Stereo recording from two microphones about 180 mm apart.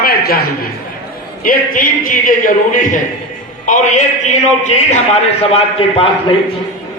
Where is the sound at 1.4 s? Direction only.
50° left (ahead or behind); by 6.1 s 30° left (ahead or behind).